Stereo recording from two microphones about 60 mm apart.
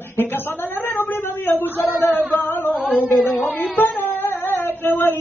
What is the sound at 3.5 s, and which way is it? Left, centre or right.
Music, left.